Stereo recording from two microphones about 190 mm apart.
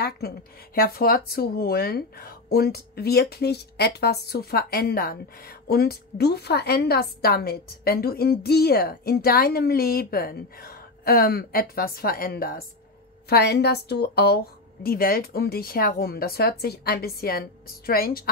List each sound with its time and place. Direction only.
0.0 s a woman's voice: 55° left (ahead or behind)